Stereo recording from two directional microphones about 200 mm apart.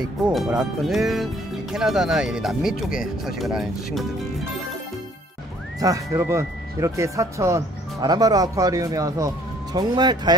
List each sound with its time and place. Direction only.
0.3 s speech: centre (ahead or behind)
2.9 s speech: 45° left (ahead or behind)
3.3 s speech: centre (ahead or behind)
5.8 s speech: 15° right (ahead or behind)